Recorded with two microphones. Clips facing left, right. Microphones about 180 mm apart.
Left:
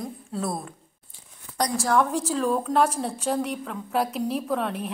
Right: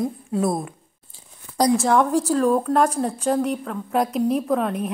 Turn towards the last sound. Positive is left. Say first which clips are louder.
# right 5 dB
turn(degrees=0)  # may be behind; listen again after turning